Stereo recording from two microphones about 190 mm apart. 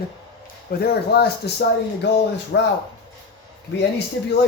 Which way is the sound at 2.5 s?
65° left (ahead or behind).